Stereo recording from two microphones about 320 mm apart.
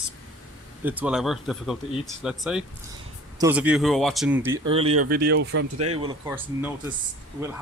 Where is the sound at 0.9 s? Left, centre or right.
Centre.